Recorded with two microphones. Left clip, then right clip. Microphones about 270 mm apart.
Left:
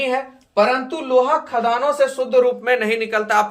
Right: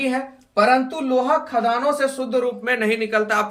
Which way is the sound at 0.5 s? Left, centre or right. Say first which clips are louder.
Even; centre.